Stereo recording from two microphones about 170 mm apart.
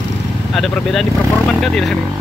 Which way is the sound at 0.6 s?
Centre (ahead or behind).